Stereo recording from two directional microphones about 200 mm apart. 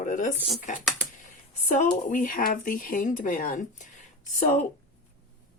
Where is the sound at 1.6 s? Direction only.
40° left (ahead or behind).